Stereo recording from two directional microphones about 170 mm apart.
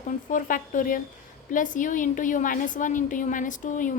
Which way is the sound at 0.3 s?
50° left (ahead or behind).